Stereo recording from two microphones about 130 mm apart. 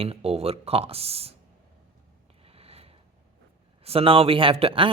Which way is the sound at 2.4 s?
50° right (ahead or behind).